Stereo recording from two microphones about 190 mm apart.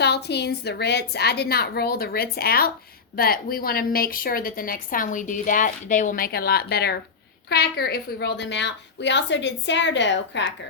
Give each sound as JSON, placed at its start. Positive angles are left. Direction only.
{"t": 0.0, "sound": "a woman's voice", "side_deg": 60}